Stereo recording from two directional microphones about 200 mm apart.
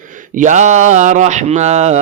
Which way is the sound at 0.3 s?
40° right (ahead or behind).